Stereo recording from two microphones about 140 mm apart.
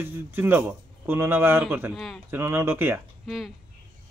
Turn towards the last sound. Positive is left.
turn(degrees=0)  # may be behind; listen again after turning